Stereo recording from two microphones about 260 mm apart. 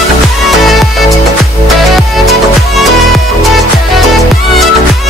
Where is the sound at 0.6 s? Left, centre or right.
Centre.